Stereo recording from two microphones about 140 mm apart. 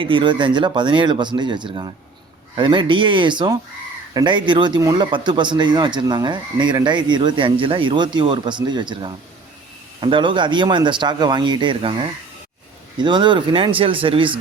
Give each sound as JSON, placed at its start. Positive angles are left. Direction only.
{"t": 0.0, "sound": "speech", "side_deg": -35}